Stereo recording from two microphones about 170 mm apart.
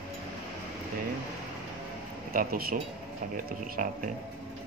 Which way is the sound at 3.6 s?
50° right (ahead or behind).